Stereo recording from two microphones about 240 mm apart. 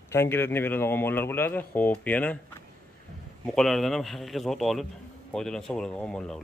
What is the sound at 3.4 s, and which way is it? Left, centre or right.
A man's voice, centre.